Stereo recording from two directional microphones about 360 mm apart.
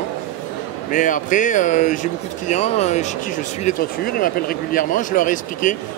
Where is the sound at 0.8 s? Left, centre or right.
Left.